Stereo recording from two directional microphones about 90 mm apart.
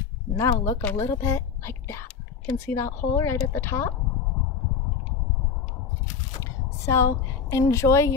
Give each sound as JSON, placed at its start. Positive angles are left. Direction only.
{"t": 0.4, "sound": "a woman's voice", "side_deg": 35}
{"t": 6.9, "sound": "a woman's voice", "side_deg": 30}